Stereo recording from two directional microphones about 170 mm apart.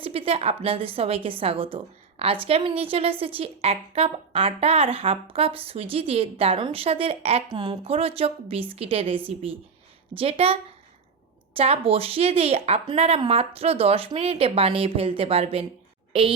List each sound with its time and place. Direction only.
0.0 s a woman's voice: 35° right (ahead or behind)